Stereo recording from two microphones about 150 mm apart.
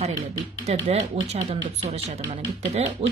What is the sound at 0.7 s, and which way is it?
Speech, 45° right (ahead or behind).